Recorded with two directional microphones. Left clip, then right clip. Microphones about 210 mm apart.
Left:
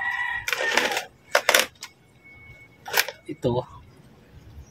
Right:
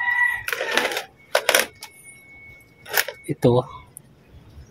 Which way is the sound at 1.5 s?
5° left (ahead or behind).